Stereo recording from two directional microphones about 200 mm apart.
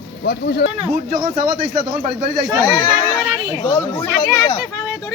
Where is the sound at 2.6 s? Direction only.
20° left (ahead or behind).